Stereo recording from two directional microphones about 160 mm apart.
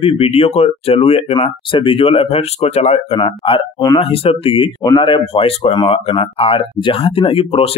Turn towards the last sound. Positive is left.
turn(degrees=35)  # may be behind; listen again after turning